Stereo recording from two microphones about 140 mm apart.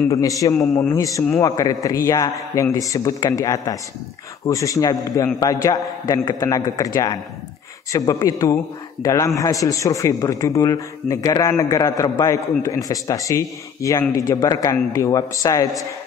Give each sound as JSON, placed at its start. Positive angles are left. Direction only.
{"t": 0.1, "sound": "a man's voice", "side_deg": 25}